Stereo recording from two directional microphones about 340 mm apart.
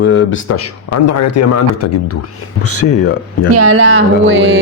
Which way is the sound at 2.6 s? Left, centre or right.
Left.